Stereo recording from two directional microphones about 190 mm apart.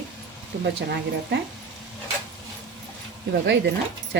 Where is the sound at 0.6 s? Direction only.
65° right (ahead or behind).